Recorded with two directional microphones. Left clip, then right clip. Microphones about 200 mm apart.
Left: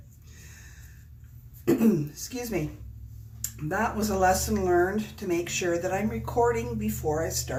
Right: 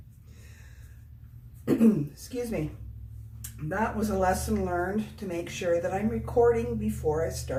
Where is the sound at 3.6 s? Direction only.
35° left (ahead or behind).